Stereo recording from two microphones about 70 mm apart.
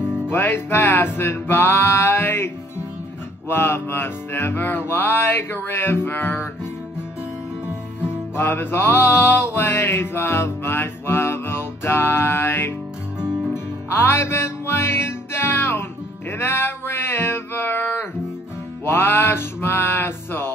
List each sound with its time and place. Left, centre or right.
0.3 s music: left
8.4 s mantra: left
13.8 s music: left
16.3 s a sound: left
18.9 s mantra: left